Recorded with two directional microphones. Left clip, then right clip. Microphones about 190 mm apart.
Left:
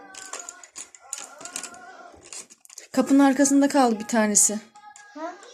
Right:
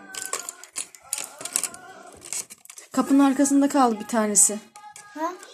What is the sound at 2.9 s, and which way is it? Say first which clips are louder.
Speech: left 1 dB; 25° left (ahead or behind).